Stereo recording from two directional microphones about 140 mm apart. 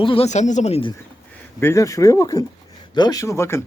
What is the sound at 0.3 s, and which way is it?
Speech, 60° left (ahead or behind).